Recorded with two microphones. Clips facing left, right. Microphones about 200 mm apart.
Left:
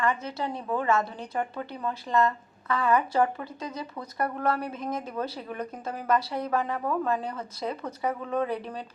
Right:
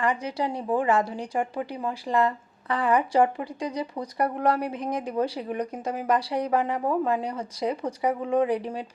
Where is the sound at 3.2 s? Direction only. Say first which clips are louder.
Right 3 dB; 15° right (ahead or behind).